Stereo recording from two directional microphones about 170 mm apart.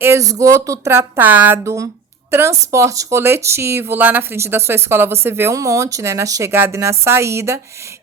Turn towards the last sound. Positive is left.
turn(degrees=-15)  # may be behind; listen again after turning